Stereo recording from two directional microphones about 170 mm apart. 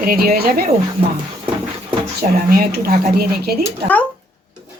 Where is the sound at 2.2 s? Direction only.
65° right (ahead or behind).